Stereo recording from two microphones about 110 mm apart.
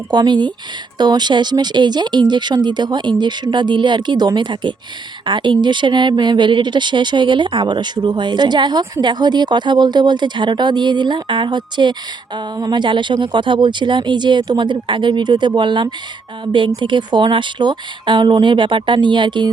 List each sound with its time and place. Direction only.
0.1 s speech: 40° right (ahead or behind)